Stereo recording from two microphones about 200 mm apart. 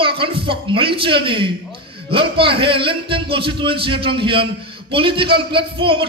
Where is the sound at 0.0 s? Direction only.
25° right (ahead or behind).